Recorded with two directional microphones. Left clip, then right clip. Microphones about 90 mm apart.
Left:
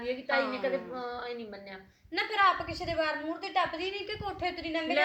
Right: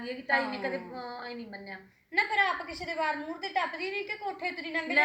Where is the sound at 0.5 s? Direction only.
20° left (ahead or behind).